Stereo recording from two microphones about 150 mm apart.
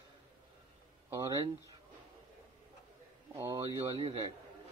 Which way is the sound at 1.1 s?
20° right (ahead or behind).